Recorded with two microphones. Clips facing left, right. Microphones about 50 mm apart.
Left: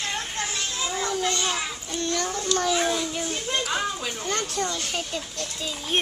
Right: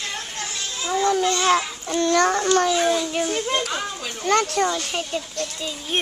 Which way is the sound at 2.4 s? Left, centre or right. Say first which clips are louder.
Right 6 dB; right.